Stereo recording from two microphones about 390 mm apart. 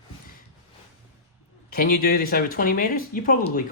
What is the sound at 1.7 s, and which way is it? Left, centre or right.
Speech, left.